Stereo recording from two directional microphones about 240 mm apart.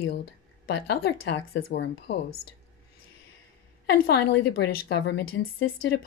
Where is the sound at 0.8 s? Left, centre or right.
Left.